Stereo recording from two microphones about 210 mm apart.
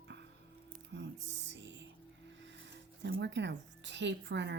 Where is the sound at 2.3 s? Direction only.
60° right (ahead or behind).